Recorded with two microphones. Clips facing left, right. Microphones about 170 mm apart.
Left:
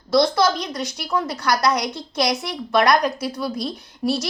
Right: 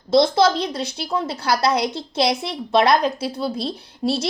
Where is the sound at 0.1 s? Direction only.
25° right (ahead or behind).